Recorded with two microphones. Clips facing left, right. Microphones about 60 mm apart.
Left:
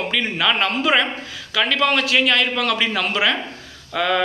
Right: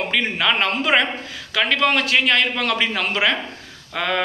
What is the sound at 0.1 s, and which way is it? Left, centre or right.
Speech, right.